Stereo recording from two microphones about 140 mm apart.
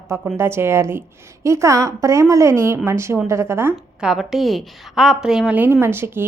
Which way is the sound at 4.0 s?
5° right (ahead or behind).